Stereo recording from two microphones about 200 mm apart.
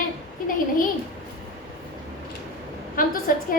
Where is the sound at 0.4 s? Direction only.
45° left (ahead or behind).